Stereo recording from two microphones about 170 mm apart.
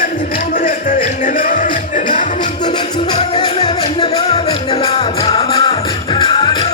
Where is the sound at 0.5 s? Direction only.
55° left (ahead or behind).